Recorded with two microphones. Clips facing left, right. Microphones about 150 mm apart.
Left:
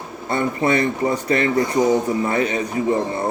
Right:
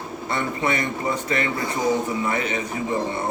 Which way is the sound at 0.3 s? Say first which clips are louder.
Left 6 dB; 35° left (ahead or behind).